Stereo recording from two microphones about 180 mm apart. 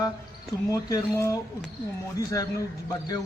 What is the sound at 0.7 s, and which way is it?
Speech, 20° left (ahead or behind).